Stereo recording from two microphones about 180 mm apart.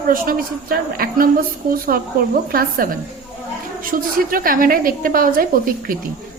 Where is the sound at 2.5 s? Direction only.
55° right (ahead or behind).